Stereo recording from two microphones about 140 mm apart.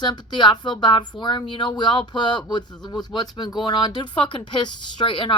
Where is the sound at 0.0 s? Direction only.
30° left (ahead or behind).